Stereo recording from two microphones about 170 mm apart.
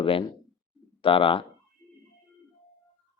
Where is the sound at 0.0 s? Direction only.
30° left (ahead or behind).